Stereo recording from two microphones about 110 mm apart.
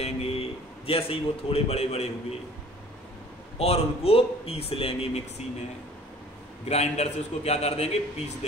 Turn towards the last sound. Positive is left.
turn(degrees=70)  # may be behind; listen again after turning